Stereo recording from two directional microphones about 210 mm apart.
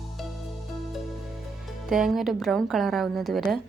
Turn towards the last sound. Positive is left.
turn(degrees=0)  # may be behind; listen again after turning